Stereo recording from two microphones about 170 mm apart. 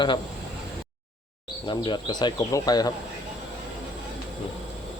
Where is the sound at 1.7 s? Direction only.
25° left (ahead or behind).